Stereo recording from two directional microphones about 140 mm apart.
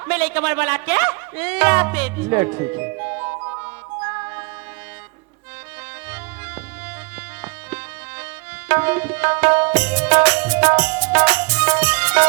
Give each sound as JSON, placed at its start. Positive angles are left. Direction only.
{"t": 0.0, "sound": "speech", "side_deg": -10}
{"t": 4.0, "sound": "music", "side_deg": -20}
{"t": 8.2, "sound": "tabla", "side_deg": -10}